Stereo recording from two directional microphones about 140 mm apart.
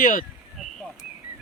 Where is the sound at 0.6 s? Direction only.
Centre (ahead or behind).